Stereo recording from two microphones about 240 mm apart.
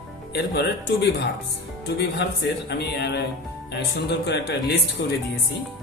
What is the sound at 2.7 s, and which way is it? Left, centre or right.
Speech, left.